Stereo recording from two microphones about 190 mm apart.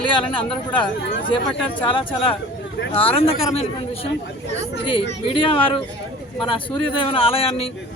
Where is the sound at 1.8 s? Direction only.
25° left (ahead or behind).